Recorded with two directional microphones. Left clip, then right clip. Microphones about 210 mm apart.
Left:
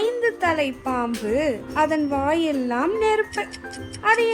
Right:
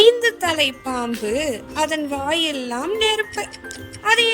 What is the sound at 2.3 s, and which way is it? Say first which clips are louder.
Speech: right 1 dB; 35° right (ahead or behind).